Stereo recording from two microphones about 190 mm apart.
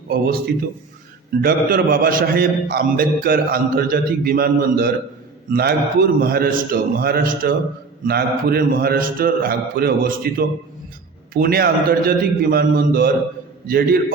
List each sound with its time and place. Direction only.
0.1 s a man's voice: 55° right (ahead or behind)